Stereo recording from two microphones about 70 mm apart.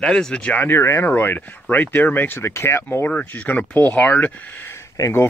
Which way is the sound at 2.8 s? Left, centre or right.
Left.